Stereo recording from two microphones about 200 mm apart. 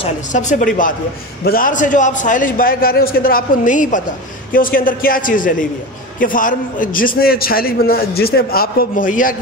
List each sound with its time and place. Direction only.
0.0 s a man's voice: 35° left (ahead or behind)